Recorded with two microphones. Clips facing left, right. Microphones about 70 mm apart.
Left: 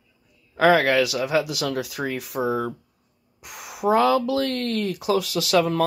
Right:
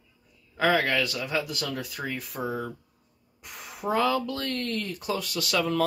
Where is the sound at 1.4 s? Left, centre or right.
Left.